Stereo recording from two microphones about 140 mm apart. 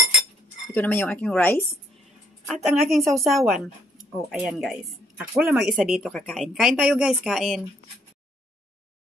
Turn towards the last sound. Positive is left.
turn(degrees=0)  # may be behind; listen again after turning